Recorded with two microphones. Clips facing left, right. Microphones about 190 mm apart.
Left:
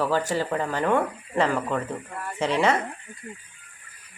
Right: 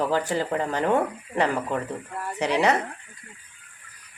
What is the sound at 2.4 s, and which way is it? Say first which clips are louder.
Speech: even; 20° right (ahead or behind).